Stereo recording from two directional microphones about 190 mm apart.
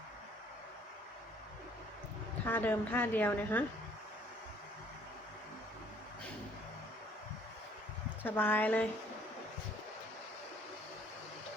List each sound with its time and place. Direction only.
2.4 s a woman's voice: 10° left (ahead or behind)
8.2 s a woman's voice: 10° left (ahead or behind)